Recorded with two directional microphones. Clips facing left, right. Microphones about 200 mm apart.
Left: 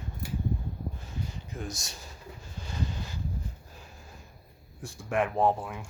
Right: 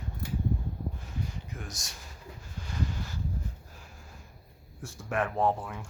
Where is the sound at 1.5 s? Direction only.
25° left (ahead or behind).